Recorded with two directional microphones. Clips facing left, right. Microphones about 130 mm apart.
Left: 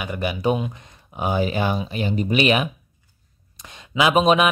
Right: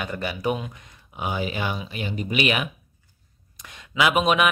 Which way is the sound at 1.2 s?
40° left (ahead or behind).